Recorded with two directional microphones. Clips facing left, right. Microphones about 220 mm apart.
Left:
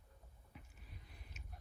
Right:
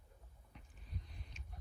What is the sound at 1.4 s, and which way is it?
Biting, 5° left (ahead or behind).